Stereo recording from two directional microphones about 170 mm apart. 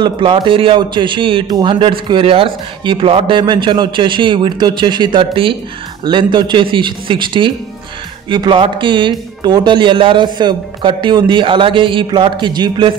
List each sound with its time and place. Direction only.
0.0 s a man's voice: 25° right (ahead or behind)